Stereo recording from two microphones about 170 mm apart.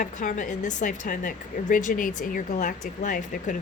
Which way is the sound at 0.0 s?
50° left (ahead or behind).